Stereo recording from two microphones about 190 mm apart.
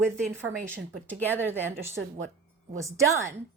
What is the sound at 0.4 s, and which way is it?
A woman's voice, 10° right (ahead or behind).